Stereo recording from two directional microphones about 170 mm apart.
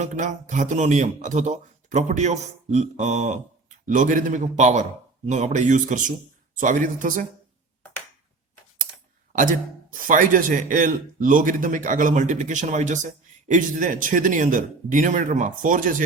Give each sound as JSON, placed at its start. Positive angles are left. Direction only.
{"t": 0.0, "sound": "a man's voice", "side_deg": -45}
{"t": 9.3, "sound": "a man's voice", "side_deg": -50}